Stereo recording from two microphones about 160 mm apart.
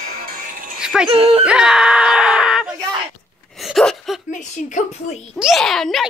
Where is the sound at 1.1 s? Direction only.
40° right (ahead or behind).